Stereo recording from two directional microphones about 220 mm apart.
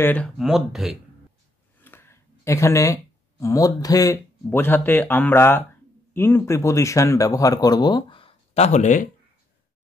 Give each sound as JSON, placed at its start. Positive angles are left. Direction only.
{"t": 0.0, "sound": "speech", "side_deg": 5}
{"t": 1.8, "sound": "speech", "side_deg": 10}